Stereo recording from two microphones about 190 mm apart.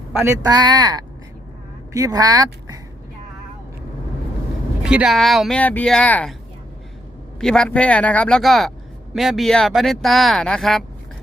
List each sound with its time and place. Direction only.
0.1 s a man's voice: 10° right (ahead or behind)
4.8 s speech: 5° right (ahead or behind)
7.3 s speech: 5° left (ahead or behind)